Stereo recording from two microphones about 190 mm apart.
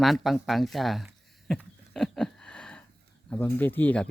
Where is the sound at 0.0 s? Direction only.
Centre (ahead or behind).